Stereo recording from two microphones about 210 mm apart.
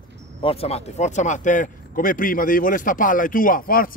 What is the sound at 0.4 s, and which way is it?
A man's voice, 25° left (ahead or behind).